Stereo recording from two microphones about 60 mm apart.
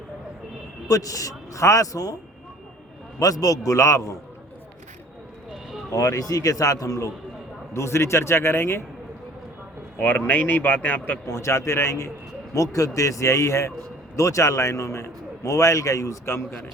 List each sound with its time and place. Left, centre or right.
0.9 s a man's voice: left
3.2 s a man's voice: left
5.9 s a man's voice: left
7.7 s a man's voice: left
10.0 s speech: left
11.3 s a man's voice: left
12.7 s a man's voice: left
16.2 s a man's voice: left